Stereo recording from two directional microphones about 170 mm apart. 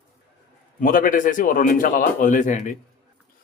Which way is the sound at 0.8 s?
55° left (ahead or behind).